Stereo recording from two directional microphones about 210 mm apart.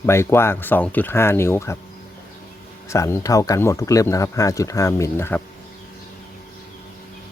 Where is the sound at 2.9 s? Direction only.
15° left (ahead or behind).